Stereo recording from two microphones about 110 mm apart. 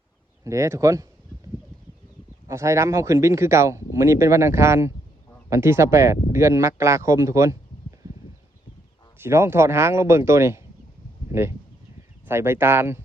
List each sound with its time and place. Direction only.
0.4 s speech: 25° right (ahead or behind)
2.5 s speech: 25° right (ahead or behind)
9.2 s speech: 25° right (ahead or behind)